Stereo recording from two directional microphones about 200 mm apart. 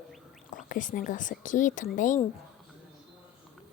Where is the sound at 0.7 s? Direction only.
40° left (ahead or behind).